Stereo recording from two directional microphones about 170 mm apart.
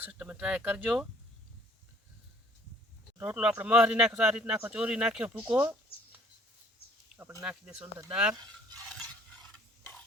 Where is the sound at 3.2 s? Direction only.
10° right (ahead or behind).